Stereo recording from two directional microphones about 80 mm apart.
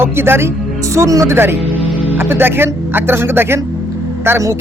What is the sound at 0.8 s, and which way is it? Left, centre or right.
Speech, right.